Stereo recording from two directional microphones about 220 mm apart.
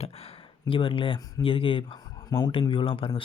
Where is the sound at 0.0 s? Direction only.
25° left (ahead or behind).